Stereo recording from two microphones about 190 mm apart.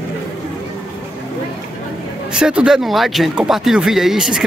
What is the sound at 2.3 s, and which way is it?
A man's voice, 5° right (ahead or behind).